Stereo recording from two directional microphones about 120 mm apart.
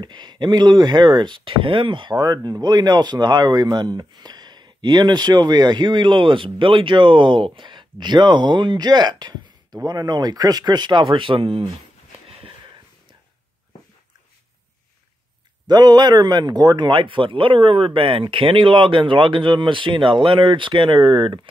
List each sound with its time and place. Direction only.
0.0 s speech: 40° right (ahead or behind)
15.6 s speech: 35° right (ahead or behind)